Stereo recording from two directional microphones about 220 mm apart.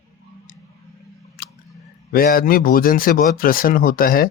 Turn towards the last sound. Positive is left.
turn(degrees=40)  # may be behind; listen again after turning